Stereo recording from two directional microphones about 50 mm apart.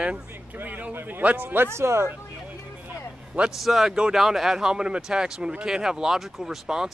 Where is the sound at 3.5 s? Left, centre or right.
Centre.